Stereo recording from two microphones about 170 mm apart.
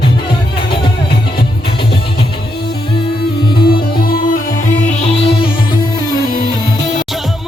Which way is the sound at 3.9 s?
60° left (ahead or behind).